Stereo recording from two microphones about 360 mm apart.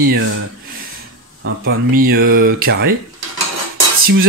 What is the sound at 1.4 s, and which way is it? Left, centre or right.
Speech, right.